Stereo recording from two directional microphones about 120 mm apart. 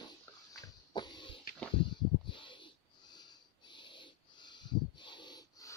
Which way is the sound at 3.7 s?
40° left (ahead or behind).